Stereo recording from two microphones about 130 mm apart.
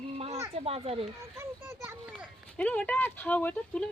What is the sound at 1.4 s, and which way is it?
Speech, 20° right (ahead or behind).